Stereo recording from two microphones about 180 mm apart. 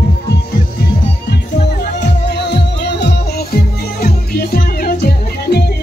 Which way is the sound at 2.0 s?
70° left (ahead or behind).